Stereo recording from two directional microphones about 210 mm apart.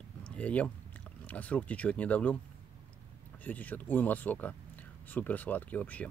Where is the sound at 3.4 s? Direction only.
10° left (ahead or behind).